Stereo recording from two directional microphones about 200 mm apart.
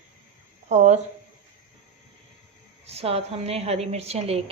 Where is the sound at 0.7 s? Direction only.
35° right (ahead or behind).